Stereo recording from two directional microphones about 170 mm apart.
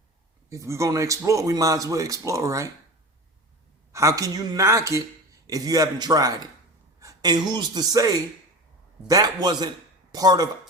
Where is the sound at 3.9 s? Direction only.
20° right (ahead or behind).